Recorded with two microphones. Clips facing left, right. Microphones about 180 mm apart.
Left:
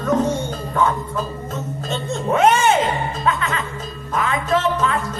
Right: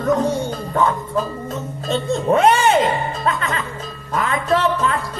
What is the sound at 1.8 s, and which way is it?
Music, 35° right (ahead or behind).